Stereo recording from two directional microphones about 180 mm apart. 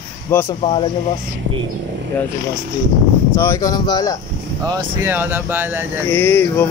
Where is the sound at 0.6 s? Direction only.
30° left (ahead or behind).